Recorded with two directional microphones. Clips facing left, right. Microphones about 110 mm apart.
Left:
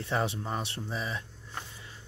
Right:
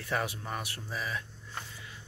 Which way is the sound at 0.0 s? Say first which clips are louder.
Left 3 dB; 25° left (ahead or behind).